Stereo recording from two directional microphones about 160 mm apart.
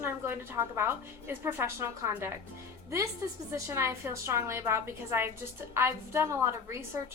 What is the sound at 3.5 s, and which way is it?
A woman's voice, 15° right (ahead or behind).